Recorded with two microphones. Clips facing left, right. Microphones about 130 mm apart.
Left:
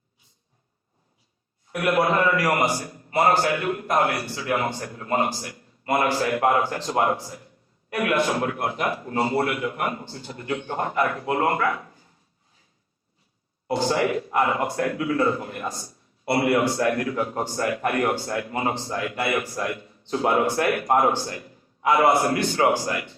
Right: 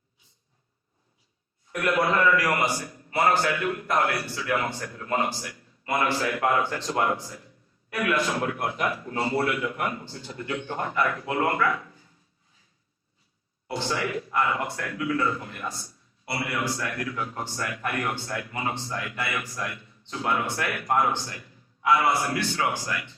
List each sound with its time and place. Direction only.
1.9 s a man's voice: 50° left (ahead or behind)
13.7 s speech: 40° left (ahead or behind)